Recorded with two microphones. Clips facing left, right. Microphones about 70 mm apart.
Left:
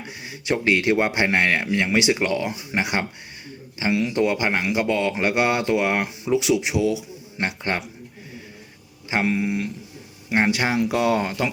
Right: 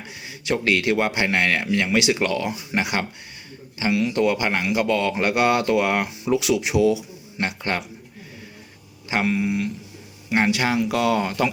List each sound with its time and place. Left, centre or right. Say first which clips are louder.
0.3 s a man's voice: left 1 dB; left
7.3 s a man's voice: even; left
9.0 s a man's voice: even; left